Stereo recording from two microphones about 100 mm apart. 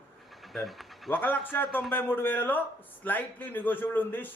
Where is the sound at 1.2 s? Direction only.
20° left (ahead or behind).